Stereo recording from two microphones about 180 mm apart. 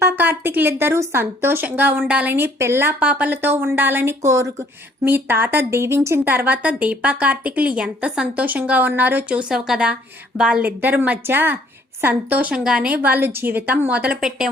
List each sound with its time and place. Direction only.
0.0 s a woman's voice: 10° right (ahead or behind)